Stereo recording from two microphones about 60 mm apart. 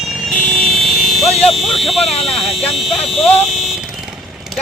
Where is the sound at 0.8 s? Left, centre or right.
Centre.